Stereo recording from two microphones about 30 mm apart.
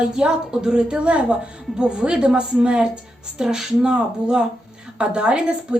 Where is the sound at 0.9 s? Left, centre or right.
Right.